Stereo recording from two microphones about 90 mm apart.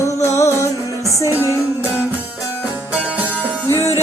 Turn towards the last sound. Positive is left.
turn(degrees=30)  # may be behind; listen again after turning